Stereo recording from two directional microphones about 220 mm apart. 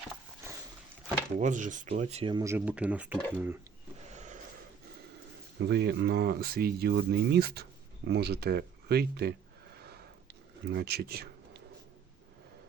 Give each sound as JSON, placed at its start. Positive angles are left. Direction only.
{"t": 1.4, "sound": "speech", "side_deg": -35}
{"t": 5.6, "sound": "speech", "side_deg": -50}
{"t": 9.7, "sound": "a sound", "side_deg": -45}